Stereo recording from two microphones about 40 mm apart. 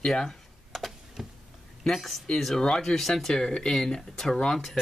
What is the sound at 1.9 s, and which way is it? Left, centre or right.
Speech, centre.